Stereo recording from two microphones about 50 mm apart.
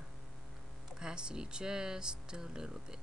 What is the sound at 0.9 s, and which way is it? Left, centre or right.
Speech, centre.